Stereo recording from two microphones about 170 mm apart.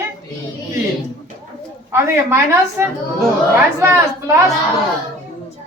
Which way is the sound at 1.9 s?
15° right (ahead or behind).